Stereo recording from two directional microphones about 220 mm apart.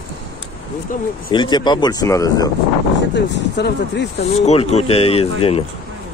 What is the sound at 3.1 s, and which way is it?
Speech, 50° left (ahead or behind).